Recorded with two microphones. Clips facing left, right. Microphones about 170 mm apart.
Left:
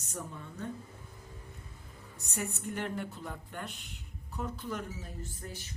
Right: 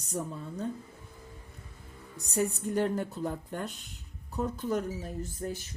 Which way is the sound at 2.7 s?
40° right (ahead or behind).